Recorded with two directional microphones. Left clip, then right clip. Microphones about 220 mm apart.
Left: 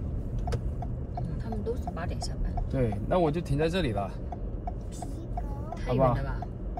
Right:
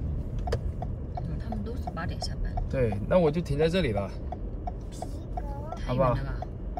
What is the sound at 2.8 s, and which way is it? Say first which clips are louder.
Speech: right 3 dB; 30° right (ahead or behind).